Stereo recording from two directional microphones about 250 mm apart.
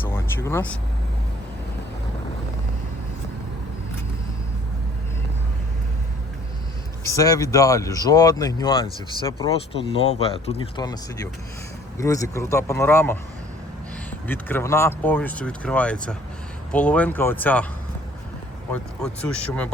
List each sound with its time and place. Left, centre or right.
0.0 s vehicle: centre
7.0 s speech: centre
14.3 s speech: centre
18.7 s speech: centre